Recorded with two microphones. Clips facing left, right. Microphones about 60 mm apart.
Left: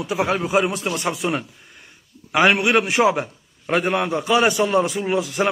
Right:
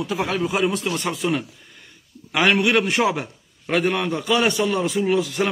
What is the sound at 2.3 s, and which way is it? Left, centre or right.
A man's voice, centre.